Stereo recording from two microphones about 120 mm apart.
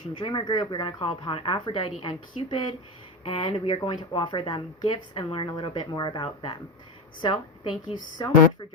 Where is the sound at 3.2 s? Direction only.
50° left (ahead or behind).